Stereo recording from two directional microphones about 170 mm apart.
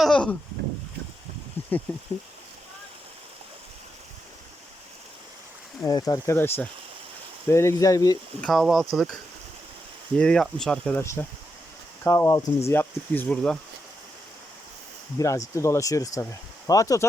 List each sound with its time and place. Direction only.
0.0 s speech: 5° left (ahead or behind)
1.6 s a sound: 35° left (ahead or behind)
5.8 s speech: 20° left (ahead or behind)
8.4 s speech: centre (ahead or behind)
10.2 s speech: 5° left (ahead or behind)
11.0 s speech: 15° left (ahead or behind)
15.2 s speech: 20° left (ahead or behind)